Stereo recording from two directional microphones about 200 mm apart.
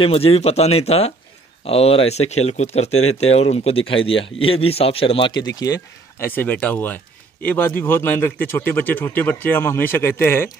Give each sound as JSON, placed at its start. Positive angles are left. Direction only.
{"t": 0.0, "sound": "speech", "side_deg": 30}